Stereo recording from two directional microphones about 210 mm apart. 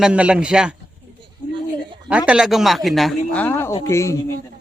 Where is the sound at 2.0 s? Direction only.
5° right (ahead or behind).